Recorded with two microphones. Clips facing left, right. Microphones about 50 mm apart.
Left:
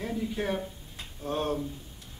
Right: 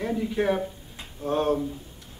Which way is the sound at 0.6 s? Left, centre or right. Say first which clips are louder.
Right 6 dB; centre.